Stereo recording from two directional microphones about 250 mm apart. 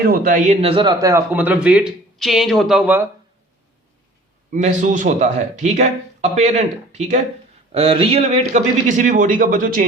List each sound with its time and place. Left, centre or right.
0.0 s a man's voice: right; by 3.1 s centre
4.5 s speech: right